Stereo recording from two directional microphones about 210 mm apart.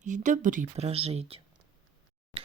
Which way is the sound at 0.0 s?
35° right (ahead or behind).